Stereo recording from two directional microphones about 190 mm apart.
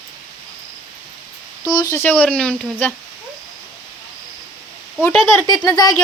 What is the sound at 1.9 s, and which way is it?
Speech, 10° left (ahead or behind).